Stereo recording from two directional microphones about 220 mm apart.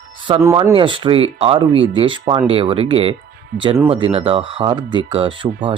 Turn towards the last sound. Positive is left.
turn(degrees=-25)  # may be behind; listen again after turning